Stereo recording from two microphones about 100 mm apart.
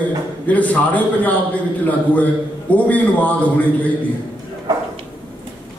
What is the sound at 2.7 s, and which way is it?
Speech, 15° left (ahead or behind).